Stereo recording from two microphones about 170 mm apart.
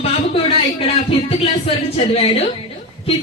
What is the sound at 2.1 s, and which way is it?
Speech, 35° left (ahead or behind).